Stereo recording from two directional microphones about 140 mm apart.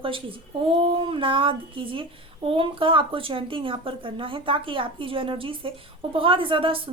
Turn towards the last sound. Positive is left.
turn(degrees=-40)  # may be behind; listen again after turning